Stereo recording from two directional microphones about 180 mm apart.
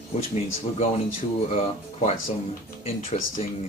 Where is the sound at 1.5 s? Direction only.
35° left (ahead or behind).